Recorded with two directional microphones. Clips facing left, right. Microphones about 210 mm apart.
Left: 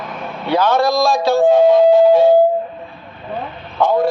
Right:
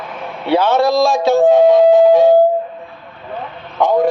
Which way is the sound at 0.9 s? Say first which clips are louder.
Right 2 dB; 20° right (ahead or behind).